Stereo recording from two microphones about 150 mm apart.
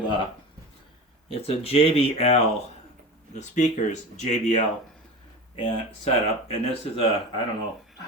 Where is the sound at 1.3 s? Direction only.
40° left (ahead or behind).